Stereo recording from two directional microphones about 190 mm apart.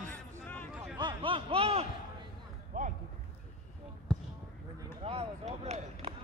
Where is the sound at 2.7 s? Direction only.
45° right (ahead or behind).